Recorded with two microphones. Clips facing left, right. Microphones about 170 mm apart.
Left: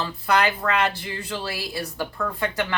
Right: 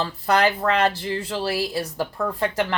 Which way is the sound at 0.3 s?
35° right (ahead or behind).